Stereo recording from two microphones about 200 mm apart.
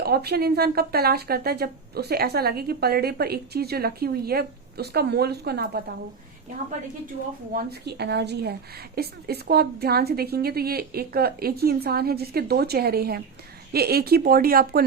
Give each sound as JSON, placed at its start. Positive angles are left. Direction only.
{"t": 0.0, "sound": "speech", "side_deg": -50}
{"t": 7.5, "sound": "a woman's voice", "side_deg": -55}